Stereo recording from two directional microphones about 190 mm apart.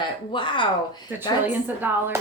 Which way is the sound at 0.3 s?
25° left (ahead or behind).